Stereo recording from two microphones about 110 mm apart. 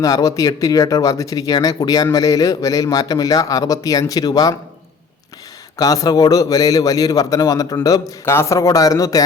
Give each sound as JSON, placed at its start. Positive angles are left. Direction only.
{"t": 0.0, "sound": "a man's voice", "side_deg": 30}
{"t": 5.7, "sound": "a man's voice", "side_deg": 30}